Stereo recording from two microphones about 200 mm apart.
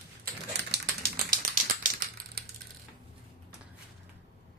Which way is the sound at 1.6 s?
45° right (ahead or behind).